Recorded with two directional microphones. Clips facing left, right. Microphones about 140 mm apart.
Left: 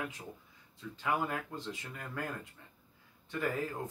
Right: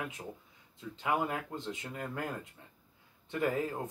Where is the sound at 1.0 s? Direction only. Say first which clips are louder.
Right 2 dB; 20° right (ahead or behind).